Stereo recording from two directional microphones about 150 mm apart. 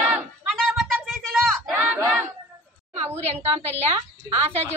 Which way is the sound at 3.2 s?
45° right (ahead or behind).